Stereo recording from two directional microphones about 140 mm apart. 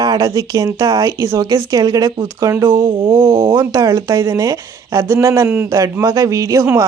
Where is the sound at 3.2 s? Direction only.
40° right (ahead or behind).